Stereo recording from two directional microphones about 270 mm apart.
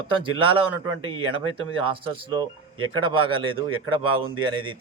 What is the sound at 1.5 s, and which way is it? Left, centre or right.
A man's voice, centre.